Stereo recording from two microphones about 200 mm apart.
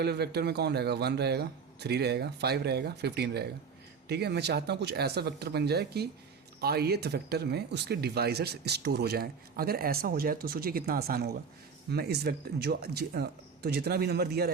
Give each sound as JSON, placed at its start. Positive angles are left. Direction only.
{"t": 0.0, "sound": "speech", "side_deg": -55}